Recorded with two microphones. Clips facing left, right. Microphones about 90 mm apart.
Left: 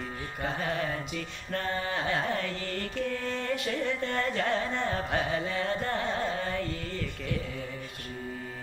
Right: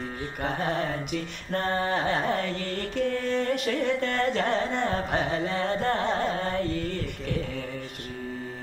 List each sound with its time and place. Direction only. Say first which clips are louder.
0.4 s music: right 3 dB; 60° right (ahead or behind)